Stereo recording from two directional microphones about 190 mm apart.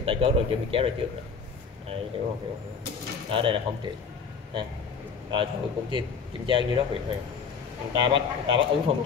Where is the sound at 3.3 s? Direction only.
25° right (ahead or behind).